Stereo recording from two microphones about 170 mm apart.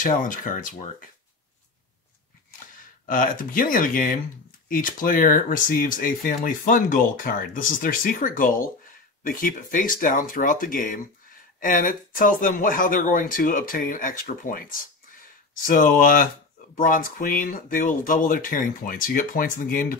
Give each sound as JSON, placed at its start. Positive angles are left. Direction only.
{"t": 0.0, "sound": "speech", "side_deg": 50}
{"t": 3.1, "sound": "speech", "side_deg": 55}